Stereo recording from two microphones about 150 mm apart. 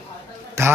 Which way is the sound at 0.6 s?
15° right (ahead or behind).